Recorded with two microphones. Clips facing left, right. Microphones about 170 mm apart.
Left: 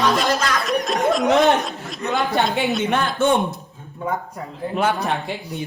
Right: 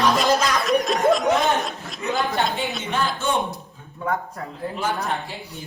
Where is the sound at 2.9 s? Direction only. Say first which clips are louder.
Left 3 dB; 60° left (ahead or behind).